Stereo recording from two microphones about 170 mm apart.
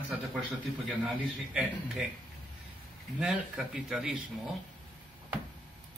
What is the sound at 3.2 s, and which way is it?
A man's voice, centre (ahead or behind).